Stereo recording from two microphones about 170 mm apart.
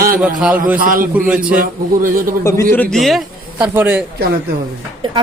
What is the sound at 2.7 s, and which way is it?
Speech, 5° left (ahead or behind).